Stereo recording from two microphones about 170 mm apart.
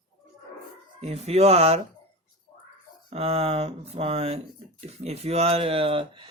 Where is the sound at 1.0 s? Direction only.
40° right (ahead or behind).